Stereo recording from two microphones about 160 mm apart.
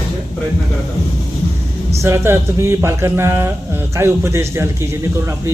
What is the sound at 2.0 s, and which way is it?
Speech, 20° right (ahead or behind).